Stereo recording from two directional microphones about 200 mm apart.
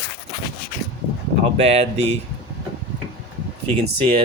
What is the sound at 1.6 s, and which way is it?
Speech, 30° right (ahead or behind).